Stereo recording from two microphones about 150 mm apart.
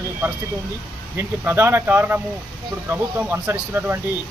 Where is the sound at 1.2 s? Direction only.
15° right (ahead or behind).